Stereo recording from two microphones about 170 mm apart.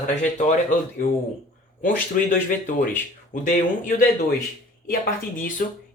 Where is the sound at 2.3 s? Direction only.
55° left (ahead or behind).